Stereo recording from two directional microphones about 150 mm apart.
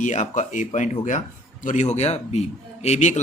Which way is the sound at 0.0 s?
50° left (ahead or behind).